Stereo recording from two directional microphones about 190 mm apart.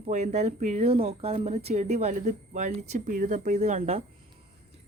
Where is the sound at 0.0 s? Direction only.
35° right (ahead or behind).